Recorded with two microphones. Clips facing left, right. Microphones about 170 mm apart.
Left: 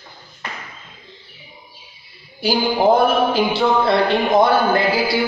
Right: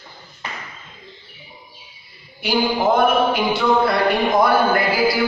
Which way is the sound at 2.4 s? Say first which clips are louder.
Left 2 dB; 35° left (ahead or behind).